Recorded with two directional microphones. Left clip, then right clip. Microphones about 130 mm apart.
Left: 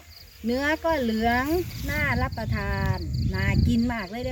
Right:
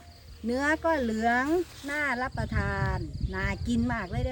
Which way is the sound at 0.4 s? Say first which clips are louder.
Left 2 dB; 30° left (ahead or behind).